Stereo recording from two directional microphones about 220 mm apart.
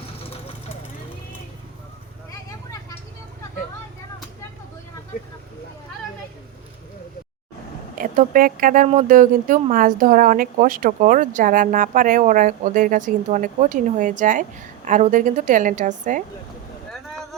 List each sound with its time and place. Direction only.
0.0 s vehicle: 25° left (ahead or behind)
5.1 s vehicle: 40° left (ahead or behind)
7.9 s speech: 40° right (ahead or behind)